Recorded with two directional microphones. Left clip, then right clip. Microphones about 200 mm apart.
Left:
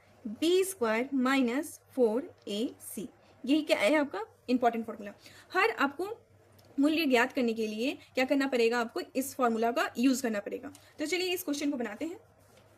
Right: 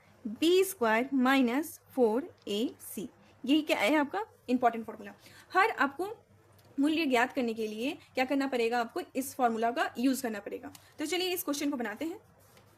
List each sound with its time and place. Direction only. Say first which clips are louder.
0.3 s a woman's voice: right 1 dB; 10° right (ahead or behind)